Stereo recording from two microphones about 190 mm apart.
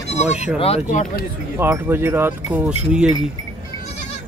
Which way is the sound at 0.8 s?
40° left (ahead or behind).